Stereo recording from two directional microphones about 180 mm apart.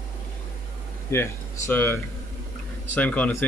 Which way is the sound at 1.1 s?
10° left (ahead or behind).